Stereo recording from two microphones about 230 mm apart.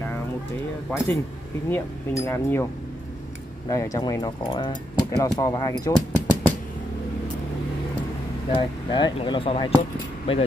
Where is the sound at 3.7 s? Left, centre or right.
Centre.